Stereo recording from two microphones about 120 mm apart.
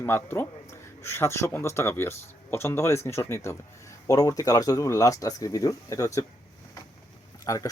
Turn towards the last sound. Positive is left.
turn(degrees=30)  # may be behind; listen again after turning